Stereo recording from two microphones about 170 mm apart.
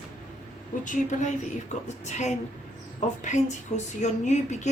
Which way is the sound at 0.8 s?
50° left (ahead or behind).